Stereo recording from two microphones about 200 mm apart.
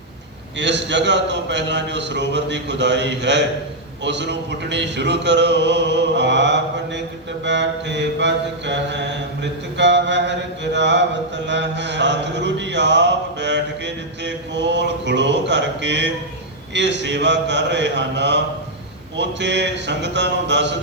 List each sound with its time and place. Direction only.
0.6 s mantra: 60° right (ahead or behind)